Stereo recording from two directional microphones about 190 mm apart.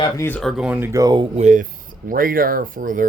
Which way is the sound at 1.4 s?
40° right (ahead or behind).